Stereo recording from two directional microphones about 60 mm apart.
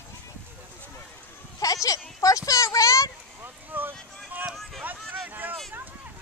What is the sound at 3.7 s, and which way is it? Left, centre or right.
Vehicle, right.